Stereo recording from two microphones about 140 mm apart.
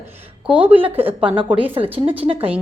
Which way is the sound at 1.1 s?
10° right (ahead or behind).